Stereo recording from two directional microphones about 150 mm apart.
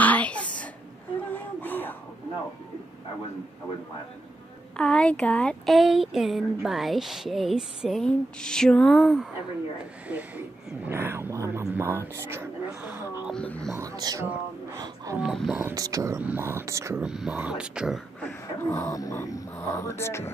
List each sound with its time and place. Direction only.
0.0 s throat clearing: 10° left (ahead or behind)
1.3 s a sound: 10° left (ahead or behind)
4.7 s speech: 5° left (ahead or behind)
10.0 s speech: 10° right (ahead or behind)
13.3 s speech: 5° left (ahead or behind)
13.7 s speech: 20° right (ahead or behind)
14.2 s speech: 15° right (ahead or behind)
15.1 s speech: centre (ahead or behind)
15.6 s speech: 20° right (ahead or behind)
17.0 s speech: 5° right (ahead or behind)
18.6 s dog: 20° left (ahead or behind)
19.5 s speech: 20° left (ahead or behind)